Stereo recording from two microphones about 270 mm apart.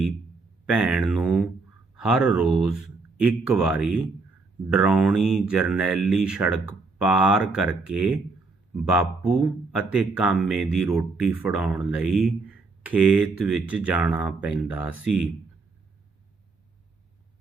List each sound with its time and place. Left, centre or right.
0.6 s speech: centre